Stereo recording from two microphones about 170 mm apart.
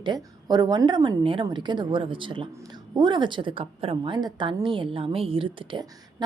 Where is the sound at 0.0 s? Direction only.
25° right (ahead or behind).